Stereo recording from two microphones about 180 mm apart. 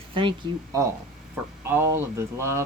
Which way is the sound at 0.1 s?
30° right (ahead or behind).